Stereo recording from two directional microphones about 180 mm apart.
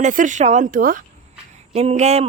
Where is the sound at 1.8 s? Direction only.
40° right (ahead or behind).